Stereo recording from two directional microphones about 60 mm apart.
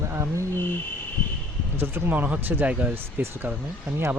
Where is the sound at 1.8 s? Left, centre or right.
Right.